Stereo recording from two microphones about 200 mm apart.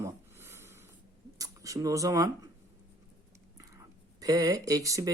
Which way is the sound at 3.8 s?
15° right (ahead or behind).